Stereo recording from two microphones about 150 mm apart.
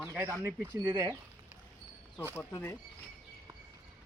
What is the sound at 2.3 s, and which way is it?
Speech, 20° left (ahead or behind).